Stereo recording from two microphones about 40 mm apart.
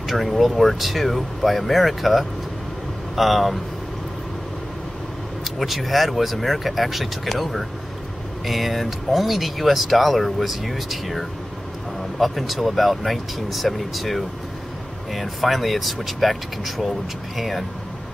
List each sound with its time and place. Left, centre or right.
0.0 s speech: centre
5.4 s speech: centre